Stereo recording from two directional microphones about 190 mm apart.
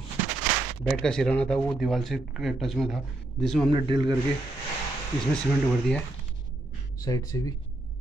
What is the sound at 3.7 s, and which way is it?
Speech, 25° right (ahead or behind).